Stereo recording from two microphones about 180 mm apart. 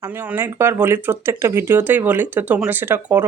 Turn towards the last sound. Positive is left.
turn(degrees=-10)  # may be behind; listen again after turning